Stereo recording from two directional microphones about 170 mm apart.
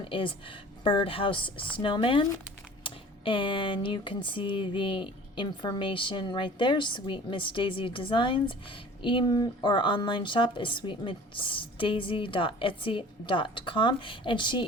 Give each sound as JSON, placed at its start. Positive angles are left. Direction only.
{"t": 0.0, "sound": "speech", "side_deg": 30}